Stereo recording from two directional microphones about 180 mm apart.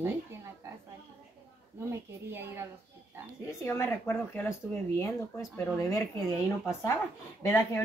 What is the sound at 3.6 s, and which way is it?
A woman's voice, 10° left (ahead or behind).